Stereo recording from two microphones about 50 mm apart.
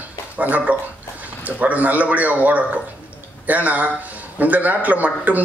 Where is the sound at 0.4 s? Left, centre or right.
Right.